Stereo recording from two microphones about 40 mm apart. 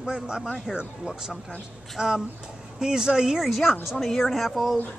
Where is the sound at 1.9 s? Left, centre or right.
Centre.